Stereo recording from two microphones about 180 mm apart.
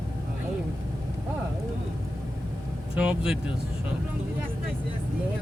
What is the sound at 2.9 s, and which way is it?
Speech, 5° right (ahead or behind).